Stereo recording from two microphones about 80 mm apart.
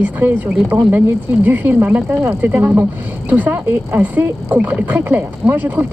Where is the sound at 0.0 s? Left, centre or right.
Right.